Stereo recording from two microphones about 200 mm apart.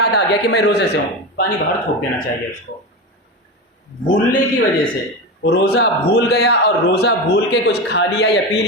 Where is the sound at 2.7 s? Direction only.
60° left (ahead or behind).